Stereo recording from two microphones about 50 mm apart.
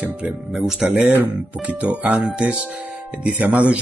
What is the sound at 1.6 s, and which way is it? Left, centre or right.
Speech, right.